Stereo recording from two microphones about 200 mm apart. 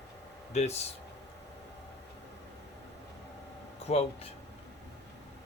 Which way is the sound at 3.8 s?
30° left (ahead or behind).